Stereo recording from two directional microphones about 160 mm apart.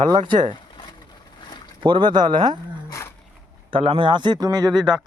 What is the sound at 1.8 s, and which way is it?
Speech, 30° right (ahead or behind).